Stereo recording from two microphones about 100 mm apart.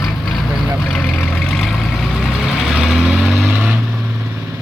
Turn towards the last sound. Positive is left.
turn(degrees=-5)  # may be behind; listen again after turning